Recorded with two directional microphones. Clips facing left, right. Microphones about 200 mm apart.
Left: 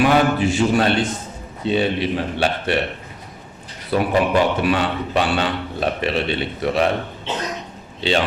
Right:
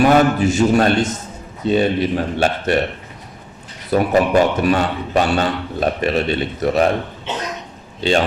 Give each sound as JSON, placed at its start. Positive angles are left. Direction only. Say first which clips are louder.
{"t": 0.0, "sound": "a man's voice", "louder": "right 3 dB", "side_deg": -45}
{"t": 3.9, "sound": "a man's voice", "louder": "right 3 dB", "side_deg": -45}
{"t": 8.0, "sound": "a man's voice", "louder": "right 3 dB", "side_deg": -45}